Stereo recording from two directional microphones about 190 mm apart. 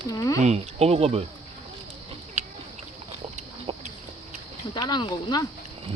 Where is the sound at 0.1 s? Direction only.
20° left (ahead or behind).